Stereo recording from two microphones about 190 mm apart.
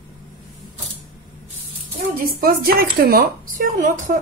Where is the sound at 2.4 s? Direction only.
50° right (ahead or behind).